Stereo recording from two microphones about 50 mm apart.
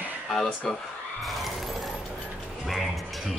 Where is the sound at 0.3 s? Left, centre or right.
Centre.